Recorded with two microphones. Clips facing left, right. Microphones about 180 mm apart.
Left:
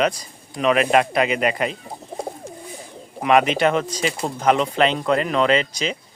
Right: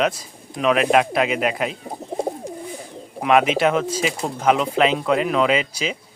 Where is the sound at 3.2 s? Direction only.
Centre (ahead or behind).